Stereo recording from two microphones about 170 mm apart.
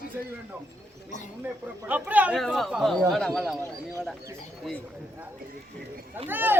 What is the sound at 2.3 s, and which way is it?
Speech, centre (ahead or behind).